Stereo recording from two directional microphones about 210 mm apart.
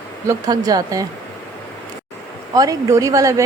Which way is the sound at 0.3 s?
15° right (ahead or behind).